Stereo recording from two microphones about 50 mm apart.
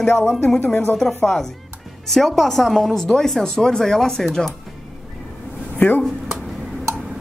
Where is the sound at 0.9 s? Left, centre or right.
Centre.